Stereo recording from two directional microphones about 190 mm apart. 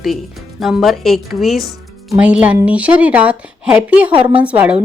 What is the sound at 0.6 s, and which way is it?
A woman's voice, centre (ahead or behind).